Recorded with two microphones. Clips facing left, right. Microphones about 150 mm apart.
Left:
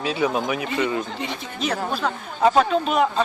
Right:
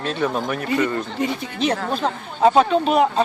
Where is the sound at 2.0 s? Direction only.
30° right (ahead or behind).